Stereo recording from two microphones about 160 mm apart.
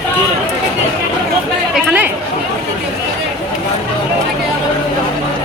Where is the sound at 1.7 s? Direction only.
10° right (ahead or behind).